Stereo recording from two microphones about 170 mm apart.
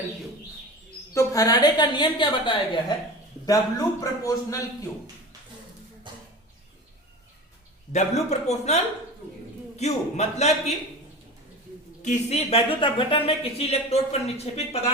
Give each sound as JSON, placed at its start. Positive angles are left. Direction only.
{"t": 1.1, "sound": "a woman's voice", "side_deg": 20}
{"t": 7.9, "sound": "speech", "side_deg": 40}
{"t": 12.0, "sound": "speech", "side_deg": 40}